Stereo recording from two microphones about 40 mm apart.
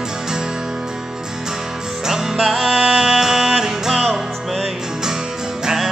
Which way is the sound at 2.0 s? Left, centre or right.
Centre.